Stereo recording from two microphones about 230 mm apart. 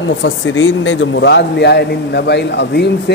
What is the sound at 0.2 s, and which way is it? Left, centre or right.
A man's voice, left.